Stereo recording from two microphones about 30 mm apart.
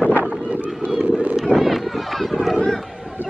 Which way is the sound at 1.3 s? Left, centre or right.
Centre.